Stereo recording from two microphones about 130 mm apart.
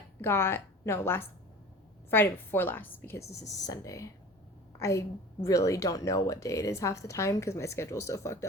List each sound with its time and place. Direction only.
0.2 s a woman's voice: 20° left (ahead or behind)